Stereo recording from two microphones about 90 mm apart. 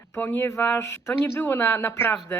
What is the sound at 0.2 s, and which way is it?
Speech, 20° left (ahead or behind).